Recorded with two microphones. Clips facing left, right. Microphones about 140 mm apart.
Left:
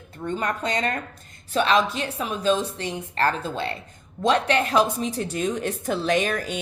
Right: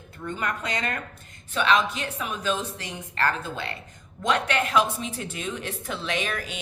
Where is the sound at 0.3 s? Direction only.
35° left (ahead or behind).